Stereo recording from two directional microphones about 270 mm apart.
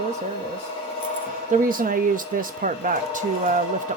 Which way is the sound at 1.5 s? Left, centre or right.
Right.